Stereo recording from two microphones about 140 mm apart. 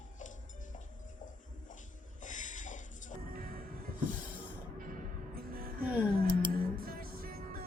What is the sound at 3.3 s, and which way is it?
Music, 90° right.